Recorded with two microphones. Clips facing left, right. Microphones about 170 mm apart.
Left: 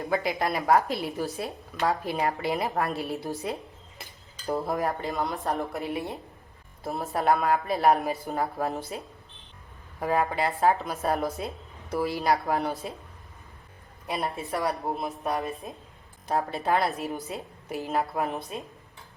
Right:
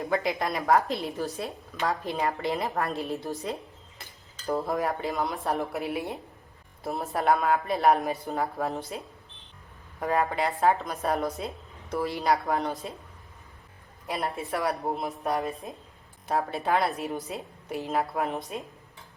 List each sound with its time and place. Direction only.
0.1 s a woman's voice: centre (ahead or behind)
4.5 s a woman's voice: centre (ahead or behind)
10.0 s a woman's voice: 5° left (ahead or behind)
14.2 s a woman's voice: centre (ahead or behind)
15.3 s a woman's voice: 20° right (ahead or behind)
16.2 s a woman's voice: centre (ahead or behind)